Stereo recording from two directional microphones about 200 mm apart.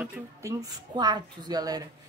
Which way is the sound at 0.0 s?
15° right (ahead or behind).